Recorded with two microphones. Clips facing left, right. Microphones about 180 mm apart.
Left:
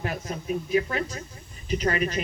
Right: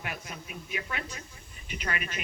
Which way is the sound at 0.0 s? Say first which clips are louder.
Left 8 dB; 35° left (ahead or behind).